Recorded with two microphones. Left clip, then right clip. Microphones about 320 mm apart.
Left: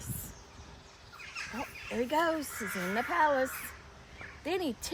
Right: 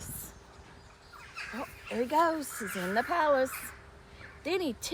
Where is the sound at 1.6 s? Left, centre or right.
Centre.